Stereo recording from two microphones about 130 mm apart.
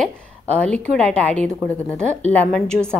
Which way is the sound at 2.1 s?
60° right (ahead or behind).